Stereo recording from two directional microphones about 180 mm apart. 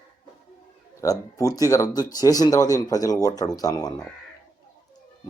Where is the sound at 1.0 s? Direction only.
20° left (ahead or behind).